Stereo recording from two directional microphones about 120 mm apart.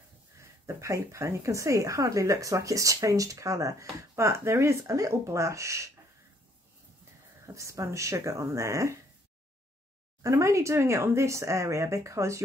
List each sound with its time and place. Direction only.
0.4 s speech: 25° right (ahead or behind)
7.4 s speech: 25° right (ahead or behind)
10.2 s speech: 25° right (ahead or behind)